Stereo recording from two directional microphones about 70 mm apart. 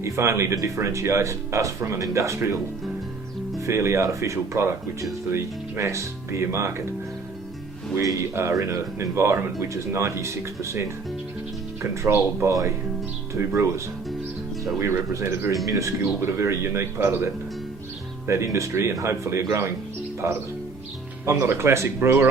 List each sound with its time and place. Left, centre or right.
0.0 s speech: right
3.7 s speech: right
8.0 s a man's voice: right
15.6 s speech: right
16.2 s a man's voice: right
18.3 s a man's voice: right